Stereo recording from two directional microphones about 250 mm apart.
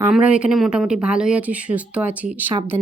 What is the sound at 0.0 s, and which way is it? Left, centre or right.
Speech, centre.